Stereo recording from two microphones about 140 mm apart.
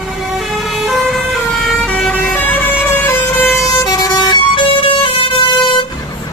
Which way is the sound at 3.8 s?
30° left (ahead or behind).